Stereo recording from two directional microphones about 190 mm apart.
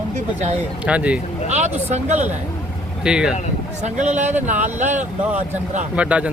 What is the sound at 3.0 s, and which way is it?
Speech, 5° right (ahead or behind).